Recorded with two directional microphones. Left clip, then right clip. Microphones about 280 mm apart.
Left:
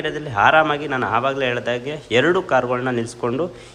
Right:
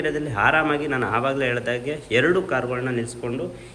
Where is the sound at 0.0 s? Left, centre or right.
Centre.